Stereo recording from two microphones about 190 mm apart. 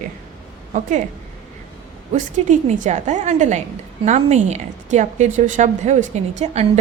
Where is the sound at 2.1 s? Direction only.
40° right (ahead or behind).